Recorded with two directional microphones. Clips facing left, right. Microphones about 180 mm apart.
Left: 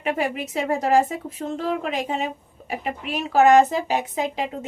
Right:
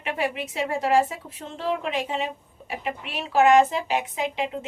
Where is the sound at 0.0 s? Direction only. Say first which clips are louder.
Left 3 dB; 40° left (ahead or behind).